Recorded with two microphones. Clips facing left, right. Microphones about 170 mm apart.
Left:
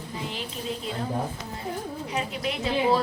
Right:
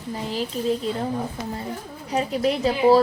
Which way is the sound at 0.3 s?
40° right (ahead or behind).